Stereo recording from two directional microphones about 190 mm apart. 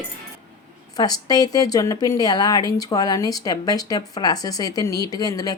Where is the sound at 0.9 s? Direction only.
20° left (ahead or behind).